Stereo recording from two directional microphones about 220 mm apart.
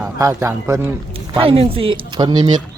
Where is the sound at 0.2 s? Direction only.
15° right (ahead or behind).